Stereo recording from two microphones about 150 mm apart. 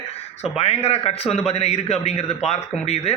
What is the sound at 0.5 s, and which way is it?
Speech, 45° left (ahead or behind).